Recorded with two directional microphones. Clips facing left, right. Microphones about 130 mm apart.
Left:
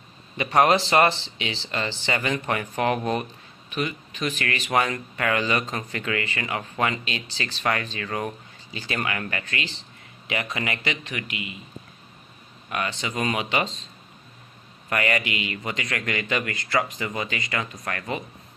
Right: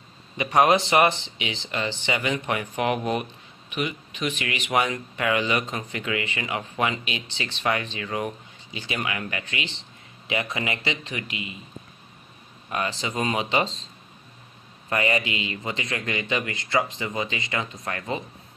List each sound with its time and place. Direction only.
0.6 s a man's voice: 20° right (ahead or behind)
12.6 s a man's voice: 30° right (ahead or behind)
14.9 s a man's voice: 25° right (ahead or behind)